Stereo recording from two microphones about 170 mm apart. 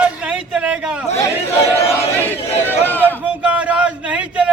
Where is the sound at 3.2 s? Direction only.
10° right (ahead or behind).